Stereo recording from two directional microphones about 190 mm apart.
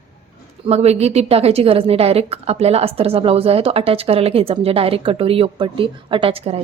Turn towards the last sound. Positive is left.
turn(degrees=-30)  # may be behind; listen again after turning